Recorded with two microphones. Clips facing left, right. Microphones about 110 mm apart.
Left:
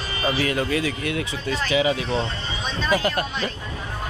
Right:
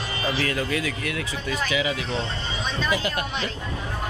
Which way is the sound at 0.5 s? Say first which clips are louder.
Left 3 dB; 25° left (ahead or behind).